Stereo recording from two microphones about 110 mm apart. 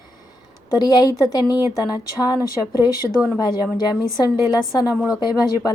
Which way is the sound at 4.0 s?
25° right (ahead or behind).